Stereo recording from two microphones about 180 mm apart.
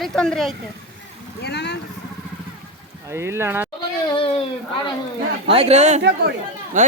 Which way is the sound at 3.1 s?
15° right (ahead or behind).